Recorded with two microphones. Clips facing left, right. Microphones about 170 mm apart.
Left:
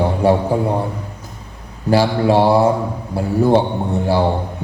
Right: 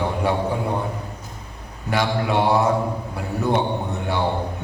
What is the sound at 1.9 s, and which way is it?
A man's voice, 30° left (ahead or behind).